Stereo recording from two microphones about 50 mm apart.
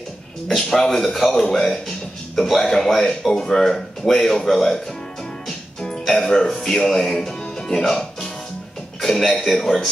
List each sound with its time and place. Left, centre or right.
0.6 s speech: centre